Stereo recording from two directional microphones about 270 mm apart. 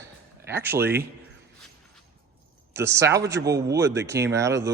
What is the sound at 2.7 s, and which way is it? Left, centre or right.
Speech, centre.